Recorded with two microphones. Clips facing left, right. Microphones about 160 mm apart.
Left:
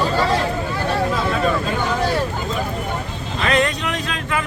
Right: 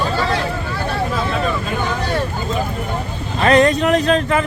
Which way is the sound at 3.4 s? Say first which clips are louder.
Right 7 dB; 40° right (ahead or behind).